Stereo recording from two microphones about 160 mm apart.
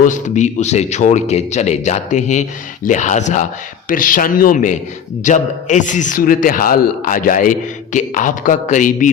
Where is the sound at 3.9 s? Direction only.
60° left (ahead or behind).